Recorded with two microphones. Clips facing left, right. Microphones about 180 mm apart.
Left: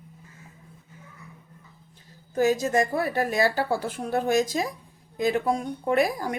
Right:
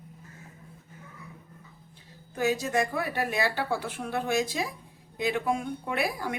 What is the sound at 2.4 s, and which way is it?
Speech, 40° left (ahead or behind).